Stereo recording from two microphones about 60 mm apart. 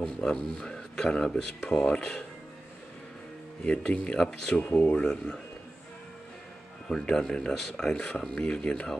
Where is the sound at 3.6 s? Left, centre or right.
Centre.